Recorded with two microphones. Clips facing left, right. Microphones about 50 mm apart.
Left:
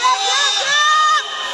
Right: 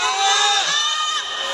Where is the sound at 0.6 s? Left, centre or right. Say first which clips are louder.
Left 9 dB; left.